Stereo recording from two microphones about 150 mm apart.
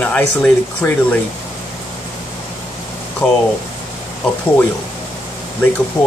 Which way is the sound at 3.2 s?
5° left (ahead or behind).